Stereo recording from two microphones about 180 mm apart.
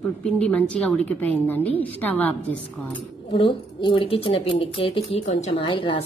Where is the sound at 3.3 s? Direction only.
30° left (ahead or behind).